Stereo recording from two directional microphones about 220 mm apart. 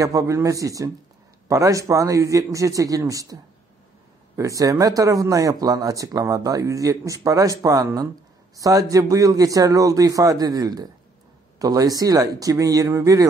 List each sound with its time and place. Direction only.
0.0 s speech: 15° right (ahead or behind)
4.4 s speech: 15° right (ahead or behind)